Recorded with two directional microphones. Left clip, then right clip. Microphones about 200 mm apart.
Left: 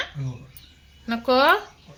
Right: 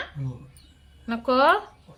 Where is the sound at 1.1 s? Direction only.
10° left (ahead or behind).